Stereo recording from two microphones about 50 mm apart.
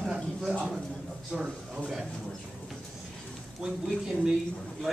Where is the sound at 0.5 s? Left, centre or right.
Centre.